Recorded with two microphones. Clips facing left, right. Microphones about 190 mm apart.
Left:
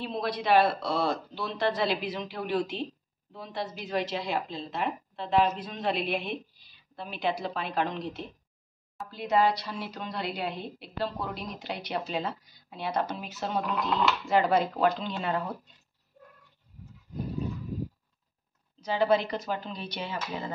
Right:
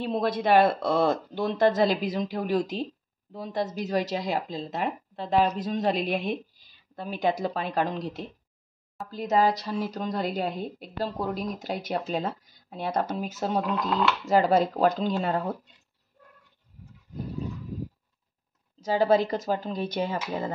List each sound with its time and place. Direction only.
0.0 s a woman's voice: 50° right (ahead or behind)
18.9 s speech: 40° right (ahead or behind)